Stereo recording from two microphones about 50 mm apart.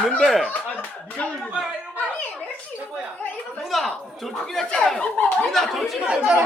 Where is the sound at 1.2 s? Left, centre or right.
Left.